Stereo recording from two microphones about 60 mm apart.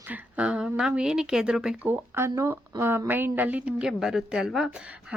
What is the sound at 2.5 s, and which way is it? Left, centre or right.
A woman's voice, right.